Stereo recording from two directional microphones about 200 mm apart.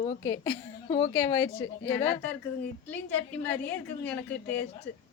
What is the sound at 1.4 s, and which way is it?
Speech, 25° left (ahead or behind).